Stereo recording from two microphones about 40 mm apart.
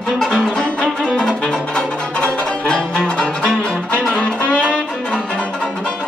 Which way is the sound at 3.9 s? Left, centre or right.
Left.